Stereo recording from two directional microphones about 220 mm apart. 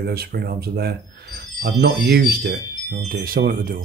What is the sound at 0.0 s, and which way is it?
Speech, 45° right (ahead or behind).